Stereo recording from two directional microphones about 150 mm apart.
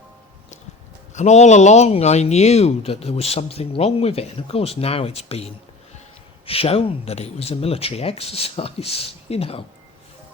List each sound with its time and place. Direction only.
1.1 s speech: 50° left (ahead or behind)